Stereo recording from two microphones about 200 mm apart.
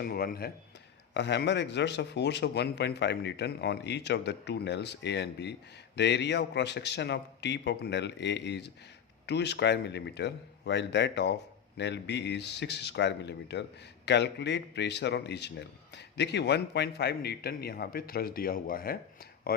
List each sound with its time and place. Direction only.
0.0 s speech: 50° left (ahead or behind)
1.1 s speech: 60° left (ahead or behind)